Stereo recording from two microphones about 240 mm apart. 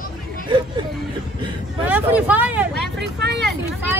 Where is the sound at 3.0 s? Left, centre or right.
Right.